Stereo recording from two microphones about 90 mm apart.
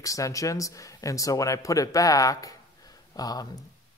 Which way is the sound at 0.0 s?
40° left (ahead or behind).